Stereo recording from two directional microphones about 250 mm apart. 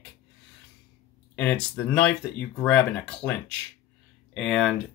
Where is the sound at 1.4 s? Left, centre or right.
Centre.